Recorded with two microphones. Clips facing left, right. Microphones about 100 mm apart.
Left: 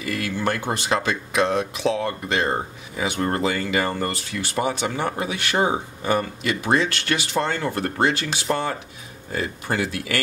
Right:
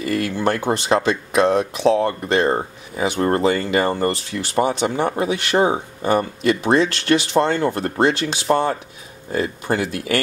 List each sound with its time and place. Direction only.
0.0 s speech: 35° right (ahead or behind)